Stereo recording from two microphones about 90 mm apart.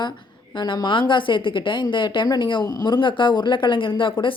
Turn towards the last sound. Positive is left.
turn(degrees=70)  # may be behind; listen again after turning